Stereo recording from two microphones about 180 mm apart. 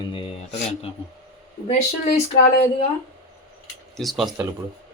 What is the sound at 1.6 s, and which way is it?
Speech, 40° left (ahead or behind).